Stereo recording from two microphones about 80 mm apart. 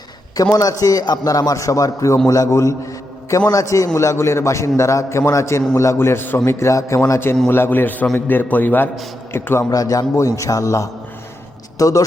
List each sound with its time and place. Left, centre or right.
0.5 s a man's voice: left
9.6 s a man's voice: left